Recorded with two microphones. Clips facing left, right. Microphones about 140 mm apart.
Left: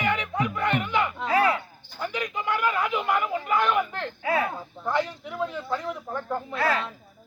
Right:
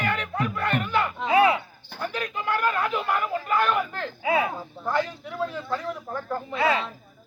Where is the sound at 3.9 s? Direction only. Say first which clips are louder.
Right 2 dB; 5° right (ahead or behind).